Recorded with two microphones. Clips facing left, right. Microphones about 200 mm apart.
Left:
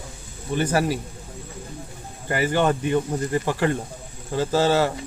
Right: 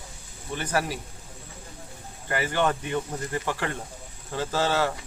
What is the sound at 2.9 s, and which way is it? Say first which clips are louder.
Speech: left 7 dB; 35° left (ahead or behind).